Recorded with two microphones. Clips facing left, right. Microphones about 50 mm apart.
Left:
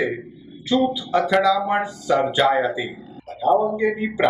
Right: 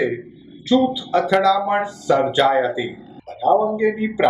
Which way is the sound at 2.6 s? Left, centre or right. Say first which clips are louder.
Right 2 dB; centre.